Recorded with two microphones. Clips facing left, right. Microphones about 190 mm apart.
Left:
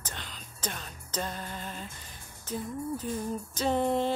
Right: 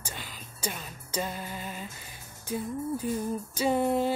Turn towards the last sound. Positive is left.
turn(degrees=-5)  # may be behind; listen again after turning